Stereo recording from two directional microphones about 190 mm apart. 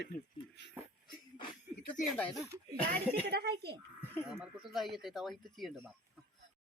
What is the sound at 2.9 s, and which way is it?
Speech, 55° right (ahead or behind).